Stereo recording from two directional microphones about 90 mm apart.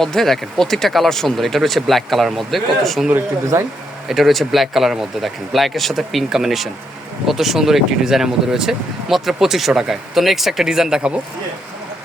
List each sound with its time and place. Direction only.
0.0 s speech: 5° left (ahead or behind)
3.5 s speech: 30° right (ahead or behind)
4.1 s speech: centre (ahead or behind)